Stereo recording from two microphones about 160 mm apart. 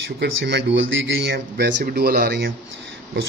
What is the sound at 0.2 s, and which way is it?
Speech, 90° right.